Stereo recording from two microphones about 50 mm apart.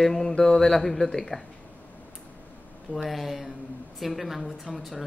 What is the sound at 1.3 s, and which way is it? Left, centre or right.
Speech, centre.